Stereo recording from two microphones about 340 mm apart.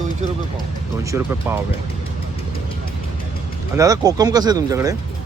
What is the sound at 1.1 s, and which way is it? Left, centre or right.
Speech, centre.